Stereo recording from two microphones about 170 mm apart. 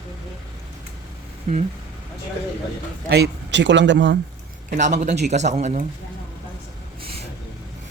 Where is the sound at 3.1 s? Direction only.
80° right.